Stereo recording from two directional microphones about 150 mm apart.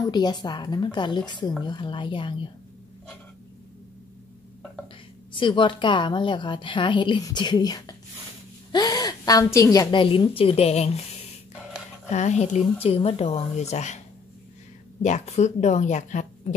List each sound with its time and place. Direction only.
0.0 s a woman's voice: 30° left (ahead or behind)
5.3 s a woman's voice: 35° left (ahead or behind); by 16.5 s 55° left (ahead or behind)